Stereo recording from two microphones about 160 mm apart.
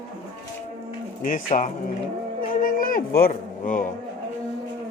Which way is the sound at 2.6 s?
60° left (ahead or behind).